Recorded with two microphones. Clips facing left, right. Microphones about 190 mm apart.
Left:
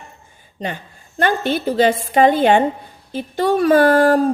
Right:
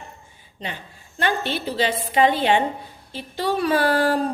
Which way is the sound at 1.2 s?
50° left (ahead or behind).